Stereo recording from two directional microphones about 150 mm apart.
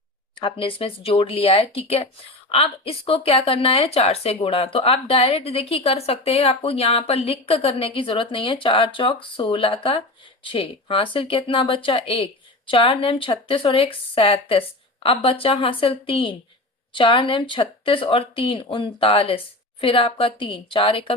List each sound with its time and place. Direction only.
0.3 s a woman's voice: 35° left (ahead or behind)